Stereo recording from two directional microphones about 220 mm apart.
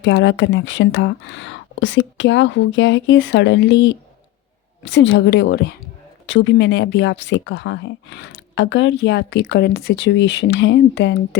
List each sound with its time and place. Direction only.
0.0 s a woman's voice: 55° left (ahead or behind)